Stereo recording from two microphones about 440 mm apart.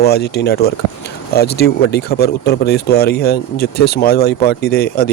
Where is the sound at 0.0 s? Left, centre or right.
Left.